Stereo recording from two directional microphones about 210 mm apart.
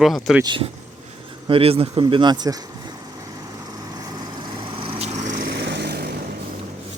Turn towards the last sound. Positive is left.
turn(degrees=-50)  # may be behind; listen again after turning